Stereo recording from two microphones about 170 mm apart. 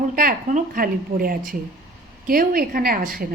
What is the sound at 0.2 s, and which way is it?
A woman's voice, 50° right (ahead or behind).